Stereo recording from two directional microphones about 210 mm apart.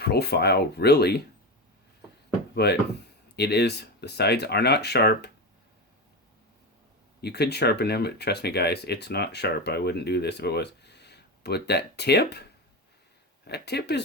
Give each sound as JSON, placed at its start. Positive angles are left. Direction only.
{"t": 0.0, "sound": "speech", "side_deg": 50}
{"t": 2.6, "sound": "speech", "side_deg": 50}
{"t": 7.2, "sound": "speech", "side_deg": 50}